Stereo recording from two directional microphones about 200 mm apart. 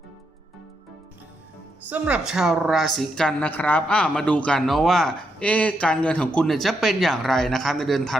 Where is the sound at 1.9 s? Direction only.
5° right (ahead or behind).